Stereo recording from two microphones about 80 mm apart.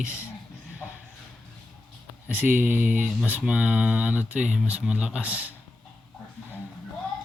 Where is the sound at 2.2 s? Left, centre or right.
Right.